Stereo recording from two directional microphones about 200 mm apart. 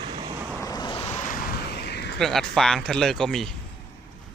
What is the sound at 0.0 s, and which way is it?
Vehicle, 30° right (ahead or behind).